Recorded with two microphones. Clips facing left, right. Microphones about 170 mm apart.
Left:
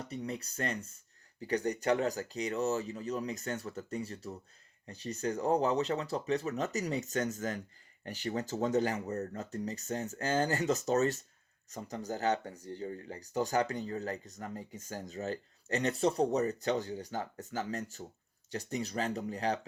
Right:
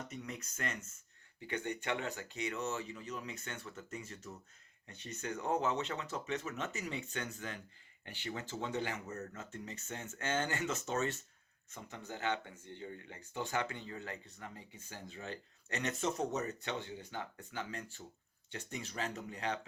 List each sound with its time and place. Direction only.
0.0 s speech: 35° left (ahead or behind)